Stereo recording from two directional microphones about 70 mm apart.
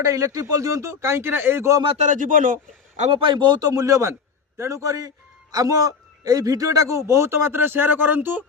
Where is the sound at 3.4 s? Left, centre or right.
Right.